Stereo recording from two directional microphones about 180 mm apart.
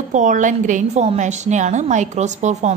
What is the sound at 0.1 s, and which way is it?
A woman's voice, 45° right (ahead or behind).